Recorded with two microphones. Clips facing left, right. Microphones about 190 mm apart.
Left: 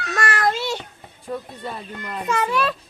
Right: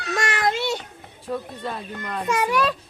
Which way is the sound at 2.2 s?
10° right (ahead or behind).